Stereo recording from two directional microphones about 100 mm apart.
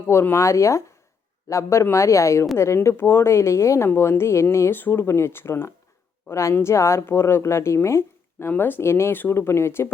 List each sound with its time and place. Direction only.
0.1 s speech: 25° left (ahead or behind)